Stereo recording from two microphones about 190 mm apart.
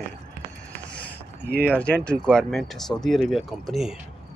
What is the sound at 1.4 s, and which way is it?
Speech, 55° right (ahead or behind).